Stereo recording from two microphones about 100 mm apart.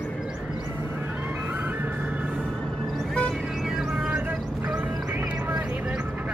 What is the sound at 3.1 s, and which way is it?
Music, 10° left (ahead or behind).